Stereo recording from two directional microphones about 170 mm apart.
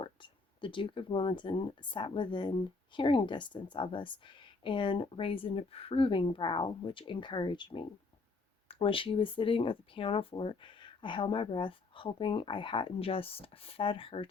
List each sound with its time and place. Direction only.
0.0 s speech: 30° left (ahead or behind)